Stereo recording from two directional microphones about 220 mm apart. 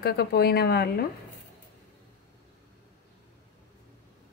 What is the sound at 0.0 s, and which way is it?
Speech, 45° left (ahead or behind).